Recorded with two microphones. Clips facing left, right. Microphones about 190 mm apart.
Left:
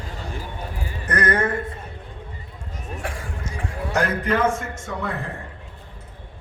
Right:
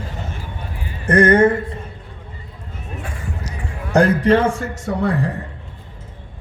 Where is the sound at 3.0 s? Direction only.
90° left.